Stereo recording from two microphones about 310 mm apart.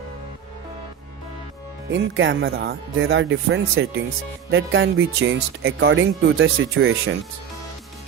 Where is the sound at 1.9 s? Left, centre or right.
Right.